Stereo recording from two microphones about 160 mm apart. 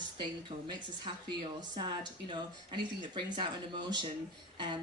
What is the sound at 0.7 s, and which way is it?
A woman's voice, 30° right (ahead or behind).